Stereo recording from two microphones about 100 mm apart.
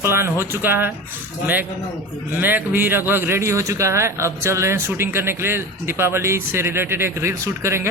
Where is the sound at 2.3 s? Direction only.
20° right (ahead or behind).